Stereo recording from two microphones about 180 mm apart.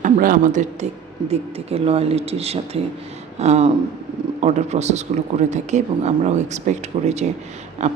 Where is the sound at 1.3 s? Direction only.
35° right (ahead or behind).